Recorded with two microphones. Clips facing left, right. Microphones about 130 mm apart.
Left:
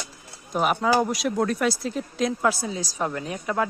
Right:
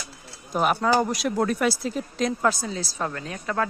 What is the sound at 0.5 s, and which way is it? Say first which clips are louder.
A man's voice: even; centre (ahead or behind).